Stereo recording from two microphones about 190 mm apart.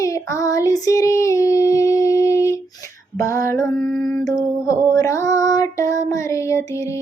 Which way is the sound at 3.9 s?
Centre (ahead or behind).